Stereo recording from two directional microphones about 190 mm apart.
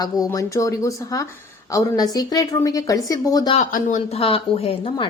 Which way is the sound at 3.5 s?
40° left (ahead or behind).